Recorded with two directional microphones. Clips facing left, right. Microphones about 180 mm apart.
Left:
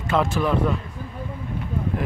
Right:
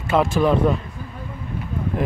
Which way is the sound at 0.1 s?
10° right (ahead or behind).